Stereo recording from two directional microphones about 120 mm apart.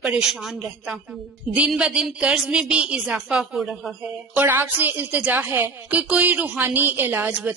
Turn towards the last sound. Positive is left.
turn(degrees=-15)  # may be behind; listen again after turning